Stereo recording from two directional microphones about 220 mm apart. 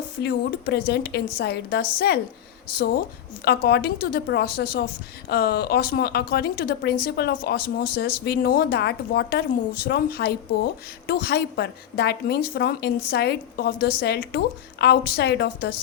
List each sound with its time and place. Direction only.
0.2 s a woman's voice: 45° left (ahead or behind)
3.4 s a woman's voice: 45° left (ahead or behind)